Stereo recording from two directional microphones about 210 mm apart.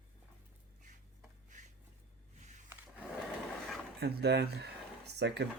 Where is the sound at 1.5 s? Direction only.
35° right (ahead or behind).